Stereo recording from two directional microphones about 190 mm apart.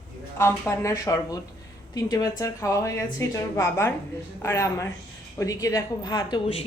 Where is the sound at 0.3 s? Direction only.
15° left (ahead or behind).